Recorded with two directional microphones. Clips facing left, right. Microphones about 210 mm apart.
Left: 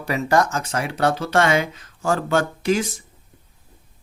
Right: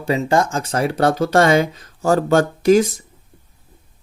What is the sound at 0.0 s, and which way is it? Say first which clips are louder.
Speech: right 2 dB; 25° right (ahead or behind).